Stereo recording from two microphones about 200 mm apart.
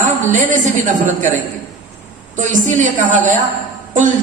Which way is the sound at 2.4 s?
40° right (ahead or behind).